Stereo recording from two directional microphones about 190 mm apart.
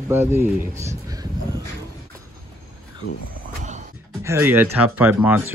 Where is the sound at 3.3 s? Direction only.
40° right (ahead or behind).